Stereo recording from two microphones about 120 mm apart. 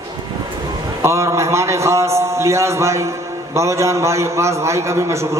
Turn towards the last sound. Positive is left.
turn(degrees=-25)  # may be behind; listen again after turning